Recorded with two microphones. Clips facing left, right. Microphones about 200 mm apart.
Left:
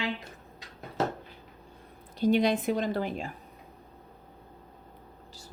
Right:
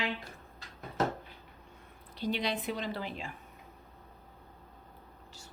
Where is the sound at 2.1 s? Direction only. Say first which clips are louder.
Left 9 dB; 45° left (ahead or behind).